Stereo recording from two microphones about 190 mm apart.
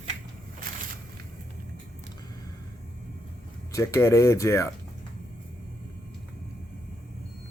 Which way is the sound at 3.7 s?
15° left (ahead or behind).